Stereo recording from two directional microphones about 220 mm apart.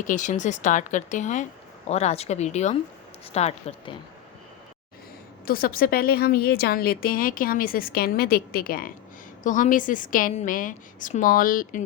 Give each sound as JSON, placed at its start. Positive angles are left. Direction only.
{"t": 0.0, "sound": "a woman's voice", "side_deg": 35}
{"t": 5.5, "sound": "a woman's voice", "side_deg": 40}